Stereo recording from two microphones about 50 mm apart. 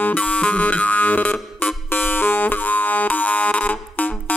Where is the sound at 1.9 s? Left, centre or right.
Left.